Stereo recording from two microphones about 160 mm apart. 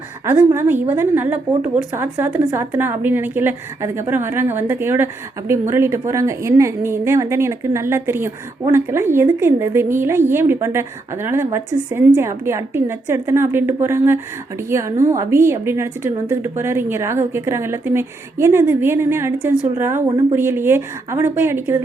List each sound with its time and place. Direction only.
0.3 s a woman's voice: 15° right (ahead or behind)